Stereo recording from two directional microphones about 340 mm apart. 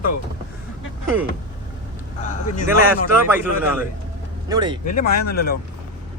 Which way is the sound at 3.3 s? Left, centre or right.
Centre.